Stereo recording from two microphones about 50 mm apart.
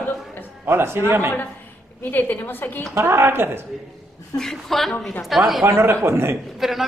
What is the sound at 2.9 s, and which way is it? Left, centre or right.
Speech, right.